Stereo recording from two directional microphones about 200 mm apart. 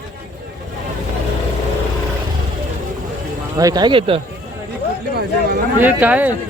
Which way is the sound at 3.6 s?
20° right (ahead or behind).